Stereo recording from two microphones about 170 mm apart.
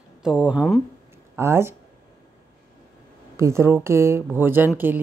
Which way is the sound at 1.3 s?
15° right (ahead or behind).